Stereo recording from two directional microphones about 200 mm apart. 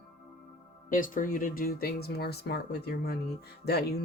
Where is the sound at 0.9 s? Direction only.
45° left (ahead or behind).